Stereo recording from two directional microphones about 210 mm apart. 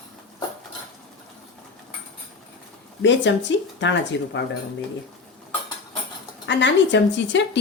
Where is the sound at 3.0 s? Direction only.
60° left (ahead or behind).